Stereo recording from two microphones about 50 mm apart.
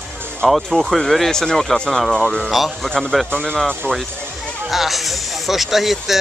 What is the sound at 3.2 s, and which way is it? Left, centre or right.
Speech, centre.